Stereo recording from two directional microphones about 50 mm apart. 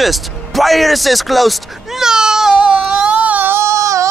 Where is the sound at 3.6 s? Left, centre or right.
Right.